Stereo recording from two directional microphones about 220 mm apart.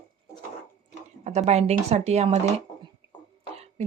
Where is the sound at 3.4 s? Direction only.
30° right (ahead or behind).